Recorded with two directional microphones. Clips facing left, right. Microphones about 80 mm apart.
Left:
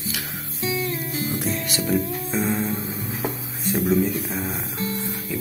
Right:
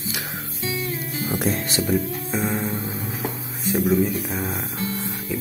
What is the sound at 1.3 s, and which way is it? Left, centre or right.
Music, right.